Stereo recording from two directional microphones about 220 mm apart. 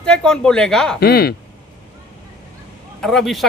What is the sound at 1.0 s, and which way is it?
Speech, 45° left (ahead or behind).